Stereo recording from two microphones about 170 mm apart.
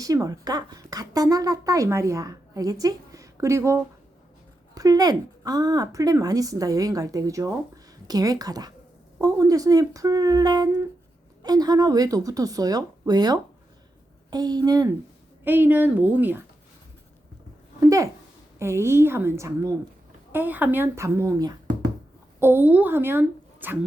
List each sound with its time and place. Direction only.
0.0 s speech: 20° right (ahead or behind)
15.4 s speech: 10° right (ahead or behind)
17.7 s a sound: 20° right (ahead or behind)
18.6 s a woman's voice: 15° right (ahead or behind)